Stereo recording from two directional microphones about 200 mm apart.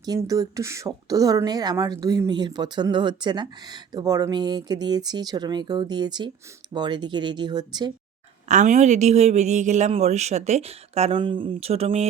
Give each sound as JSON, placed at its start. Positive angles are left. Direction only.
{"t": 0.0, "sound": "speech", "side_deg": -20}
{"t": 8.4, "sound": "a woman's voice", "side_deg": -35}